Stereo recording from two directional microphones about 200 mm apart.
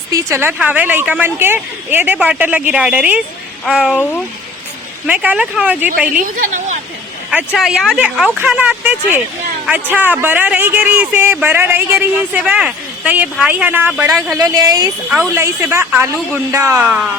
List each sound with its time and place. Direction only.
0.1 s speech: 10° right (ahead or behind)
5.0 s speech: 5° right (ahead or behind)
6.3 s a woman's voice: 40° right (ahead or behind)
7.3 s speech: centre (ahead or behind)
14.3 s speech: 15° right (ahead or behind)